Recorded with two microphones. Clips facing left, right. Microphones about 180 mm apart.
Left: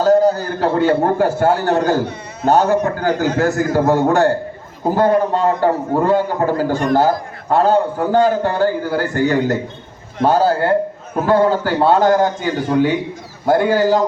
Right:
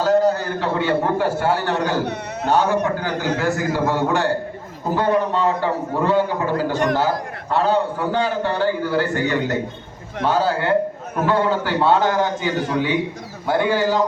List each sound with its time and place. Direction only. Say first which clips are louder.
0.0 s a man's voice: left 4 dB; 40° left (ahead or behind)